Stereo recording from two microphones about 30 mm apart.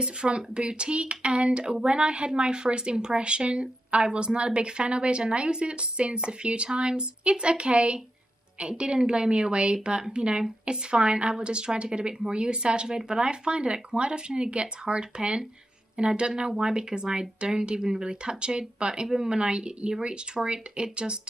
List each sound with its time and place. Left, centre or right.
0.0 s speech: right